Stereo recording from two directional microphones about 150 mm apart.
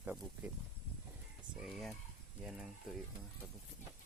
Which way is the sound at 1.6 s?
Centre (ahead or behind).